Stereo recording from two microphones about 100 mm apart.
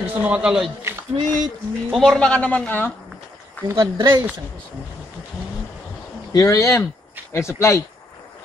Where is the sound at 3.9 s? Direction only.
50° right (ahead or behind).